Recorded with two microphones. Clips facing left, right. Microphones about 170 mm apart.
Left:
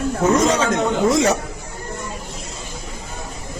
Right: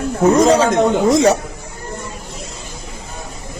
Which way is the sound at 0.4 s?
35° right (ahead or behind).